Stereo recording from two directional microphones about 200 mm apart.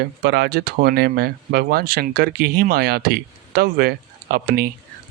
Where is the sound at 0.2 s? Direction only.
55° right (ahead or behind).